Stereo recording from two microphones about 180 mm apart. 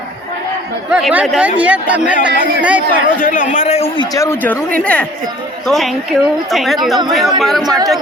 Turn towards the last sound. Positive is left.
turn(degrees=0)  # may be behind; listen again after turning